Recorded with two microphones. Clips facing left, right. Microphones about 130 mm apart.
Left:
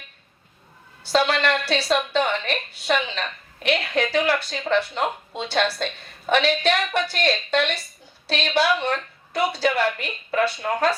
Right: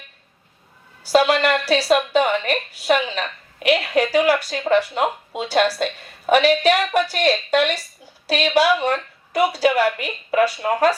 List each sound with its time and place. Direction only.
1.0 s a woman's voice: 5° right (ahead or behind)